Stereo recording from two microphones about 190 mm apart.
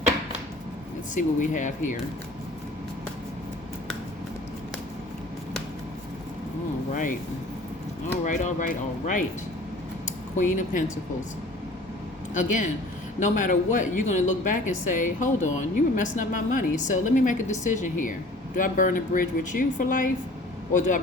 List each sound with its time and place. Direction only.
1.1 s speech: 40° left (ahead or behind)
6.9 s speech: 45° left (ahead or behind)
8.2 s speech: 40° left (ahead or behind)
10.3 s speech: 40° left (ahead or behind)
12.3 s speech: 40° left (ahead or behind)